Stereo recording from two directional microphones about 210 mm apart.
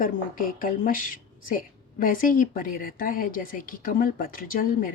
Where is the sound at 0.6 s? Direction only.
40° left (ahead or behind).